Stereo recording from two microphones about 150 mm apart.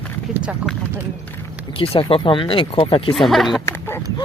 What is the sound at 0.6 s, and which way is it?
Speech, 10° right (ahead or behind).